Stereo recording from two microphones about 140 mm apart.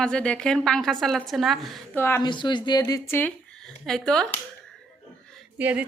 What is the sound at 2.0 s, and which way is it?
Speech, 15° left (ahead or behind).